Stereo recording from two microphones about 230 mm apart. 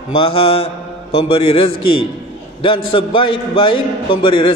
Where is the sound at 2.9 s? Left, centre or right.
Left.